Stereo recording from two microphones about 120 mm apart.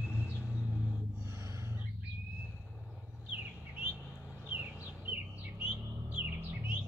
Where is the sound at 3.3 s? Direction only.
10° right (ahead or behind).